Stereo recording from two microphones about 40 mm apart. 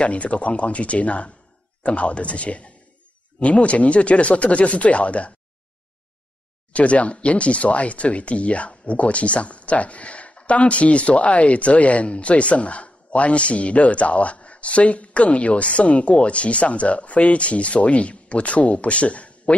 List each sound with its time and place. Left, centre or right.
0.0 s speech: left
6.7 s speech: left